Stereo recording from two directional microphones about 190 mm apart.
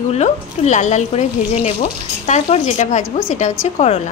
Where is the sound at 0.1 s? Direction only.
40° left (ahead or behind).